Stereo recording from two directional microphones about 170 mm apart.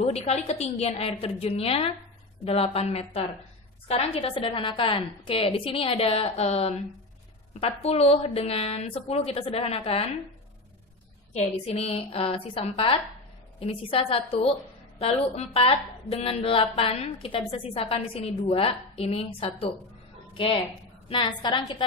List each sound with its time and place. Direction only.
0.0 s a woman's voice: 35° left (ahead or behind)
11.3 s a woman's voice: 40° left (ahead or behind)